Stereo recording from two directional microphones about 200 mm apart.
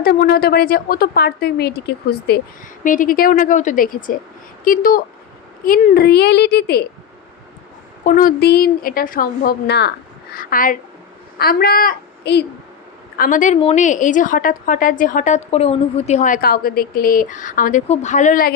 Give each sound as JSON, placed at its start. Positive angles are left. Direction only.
{"t": 0.0, "sound": "a woman's voice", "side_deg": 50}
{"t": 2.8, "sound": "a woman's voice", "side_deg": 40}
{"t": 8.0, "sound": "a woman's voice", "side_deg": 45}
{"t": 10.3, "sound": "a woman's voice", "side_deg": 45}
{"t": 13.1, "sound": "a woman's voice", "side_deg": 40}